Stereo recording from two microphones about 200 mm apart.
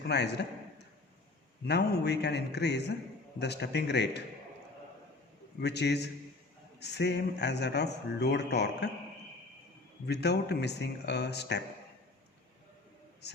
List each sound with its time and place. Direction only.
0.0 s speech: 55° left (ahead or behind)
1.6 s speech: 55° left (ahead or behind)
5.5 s speech: 55° left (ahead or behind)
10.1 s speech: 55° left (ahead or behind)